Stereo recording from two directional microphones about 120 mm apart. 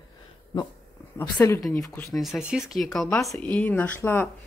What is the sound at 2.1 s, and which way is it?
Speech, centre (ahead or behind).